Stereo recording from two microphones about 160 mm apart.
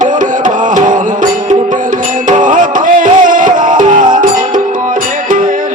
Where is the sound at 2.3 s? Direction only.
55° right (ahead or behind).